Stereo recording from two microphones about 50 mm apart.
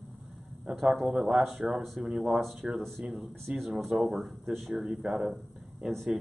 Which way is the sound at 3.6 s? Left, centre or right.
Centre.